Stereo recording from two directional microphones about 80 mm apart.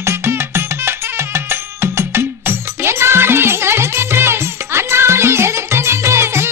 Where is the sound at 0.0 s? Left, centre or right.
Right.